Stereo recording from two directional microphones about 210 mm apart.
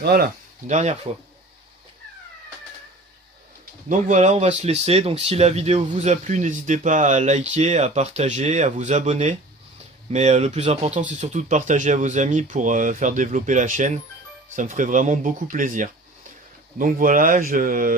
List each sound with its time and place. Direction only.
0.0 s speech: 45° right (ahead or behind)
0.7 s speech: 30° right (ahead or behind)
3.8 s speech: 35° right (ahead or behind)